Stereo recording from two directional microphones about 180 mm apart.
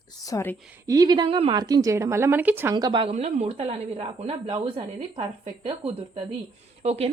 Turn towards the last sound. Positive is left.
turn(degrees=-35)  # may be behind; listen again after turning